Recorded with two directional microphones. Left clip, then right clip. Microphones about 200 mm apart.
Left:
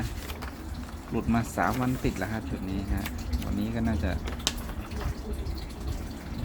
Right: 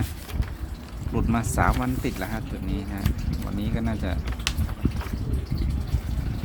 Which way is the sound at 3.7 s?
5° right (ahead or behind).